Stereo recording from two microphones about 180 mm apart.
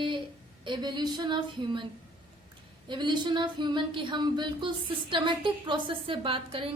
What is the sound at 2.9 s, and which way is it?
Speech, 25° right (ahead or behind).